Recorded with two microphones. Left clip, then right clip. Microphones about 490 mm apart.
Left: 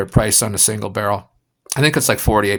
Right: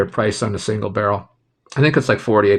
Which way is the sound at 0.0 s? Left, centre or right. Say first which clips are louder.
Even; left.